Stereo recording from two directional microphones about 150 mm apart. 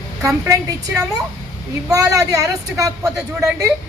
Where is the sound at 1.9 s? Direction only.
20° right (ahead or behind).